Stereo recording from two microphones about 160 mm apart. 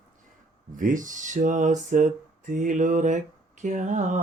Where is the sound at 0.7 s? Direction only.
55° right (ahead or behind).